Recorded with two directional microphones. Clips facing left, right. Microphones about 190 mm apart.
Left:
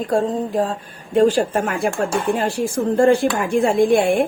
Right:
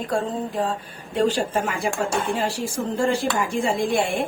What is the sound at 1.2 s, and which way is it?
Speech, 50° left (ahead or behind).